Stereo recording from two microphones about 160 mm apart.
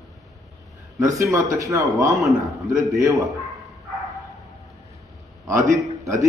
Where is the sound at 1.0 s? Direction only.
20° right (ahead or behind).